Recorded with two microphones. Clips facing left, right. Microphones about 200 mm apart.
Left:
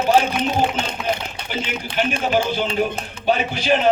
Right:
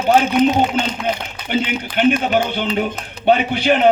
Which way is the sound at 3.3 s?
60° right (ahead or behind).